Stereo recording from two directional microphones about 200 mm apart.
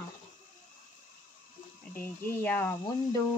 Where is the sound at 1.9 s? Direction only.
10° left (ahead or behind).